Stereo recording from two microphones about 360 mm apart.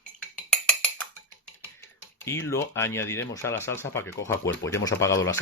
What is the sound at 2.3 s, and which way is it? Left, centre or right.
Speech, centre.